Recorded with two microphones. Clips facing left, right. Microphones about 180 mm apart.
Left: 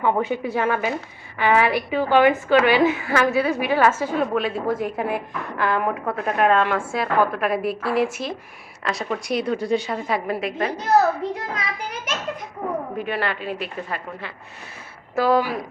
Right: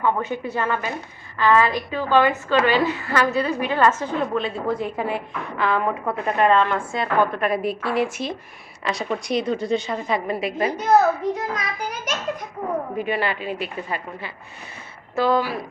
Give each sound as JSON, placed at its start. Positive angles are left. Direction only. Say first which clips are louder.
{"t": 0.0, "sound": "a woman's voice", "louder": "left 2 dB", "side_deg": 15}
{"t": 11.5, "sound": "a child's voice", "louder": "right 1 dB", "side_deg": 25}
{"t": 13.0, "sound": "a woman's voice", "louder": "right 2 dB", "side_deg": 0}
{"t": 15.1, "sound": "a woman's voice", "louder": "left 1 dB", "side_deg": 10}